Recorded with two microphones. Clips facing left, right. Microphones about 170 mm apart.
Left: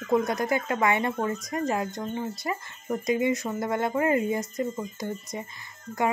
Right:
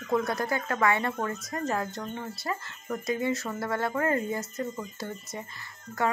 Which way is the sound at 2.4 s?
15° left (ahead or behind).